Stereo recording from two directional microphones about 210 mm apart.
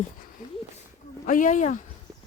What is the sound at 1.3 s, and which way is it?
Speech, 40° left (ahead or behind).